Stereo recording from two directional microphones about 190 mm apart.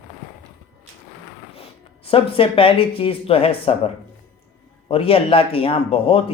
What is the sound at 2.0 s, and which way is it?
Speech, 30° left (ahead or behind).